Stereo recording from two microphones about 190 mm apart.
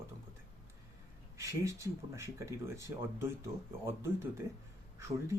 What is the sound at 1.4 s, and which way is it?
Speech, 15° right (ahead or behind).